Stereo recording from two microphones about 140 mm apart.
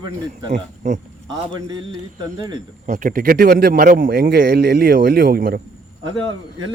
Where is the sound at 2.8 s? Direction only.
70° right (ahead or behind); by 5.6 s 90° right.